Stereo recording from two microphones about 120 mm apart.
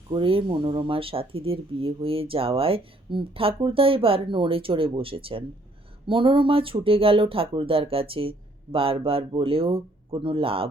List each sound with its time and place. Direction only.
0.1 s speech: 45° right (ahead or behind)